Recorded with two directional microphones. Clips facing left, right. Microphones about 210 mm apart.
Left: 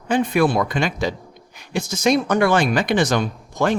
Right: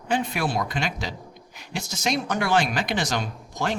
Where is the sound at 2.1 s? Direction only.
55° left (ahead or behind).